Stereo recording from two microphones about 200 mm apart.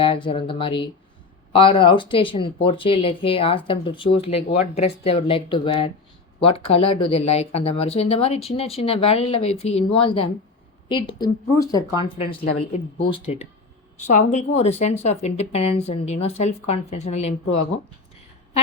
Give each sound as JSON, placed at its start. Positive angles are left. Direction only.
{"t": 0.0, "sound": "a woman's voice", "side_deg": 25}